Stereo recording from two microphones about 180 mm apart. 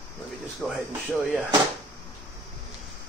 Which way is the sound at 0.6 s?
5° left (ahead or behind).